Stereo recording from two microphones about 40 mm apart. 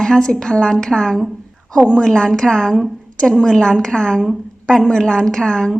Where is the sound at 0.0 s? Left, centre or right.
Centre.